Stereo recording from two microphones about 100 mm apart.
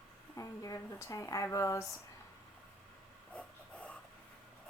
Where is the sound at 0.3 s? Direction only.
35° left (ahead or behind).